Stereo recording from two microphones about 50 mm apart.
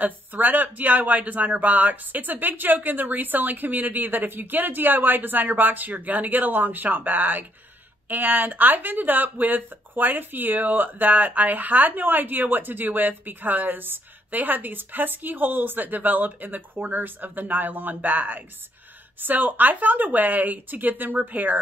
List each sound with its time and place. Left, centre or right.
0.0 s speech: right